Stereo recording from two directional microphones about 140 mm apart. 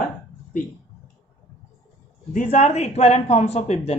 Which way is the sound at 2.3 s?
55° left (ahead or behind).